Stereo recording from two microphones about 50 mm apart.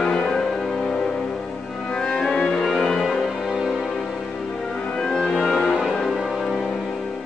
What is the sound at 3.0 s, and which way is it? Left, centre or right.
Music, centre.